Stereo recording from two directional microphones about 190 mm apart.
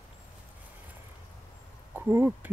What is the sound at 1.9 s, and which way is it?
Speech, 10° right (ahead or behind).